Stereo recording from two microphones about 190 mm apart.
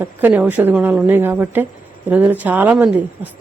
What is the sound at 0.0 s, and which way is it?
Speech, 10° right (ahead or behind).